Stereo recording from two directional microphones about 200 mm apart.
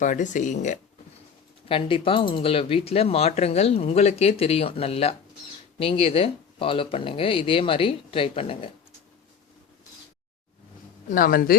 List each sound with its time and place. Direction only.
0.0 s speech: 40° left (ahead or behind)
1.6 s speech: 25° left (ahead or behind)
11.1 s speech: 45° left (ahead or behind)